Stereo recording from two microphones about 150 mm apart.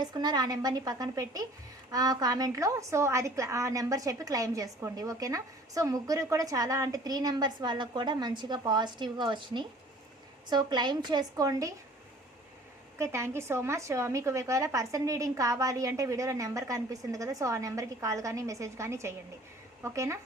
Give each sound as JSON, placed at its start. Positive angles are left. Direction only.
{"t": 0.0, "sound": "a woman's voice", "side_deg": -30}
{"t": 13.0, "sound": "a woman's voice", "side_deg": -20}